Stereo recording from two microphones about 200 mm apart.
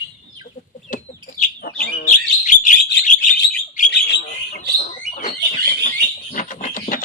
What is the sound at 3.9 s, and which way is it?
Bird, 60° left (ahead or behind).